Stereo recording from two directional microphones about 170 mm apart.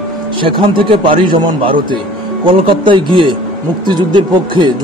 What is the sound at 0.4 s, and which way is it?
A man's voice, 30° right (ahead or behind).